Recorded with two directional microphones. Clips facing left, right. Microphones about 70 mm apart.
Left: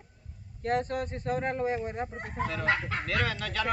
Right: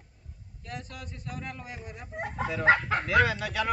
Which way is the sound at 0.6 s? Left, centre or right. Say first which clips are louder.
Left 12 dB; left.